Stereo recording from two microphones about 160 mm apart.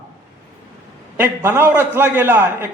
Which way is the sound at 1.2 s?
15° right (ahead or behind).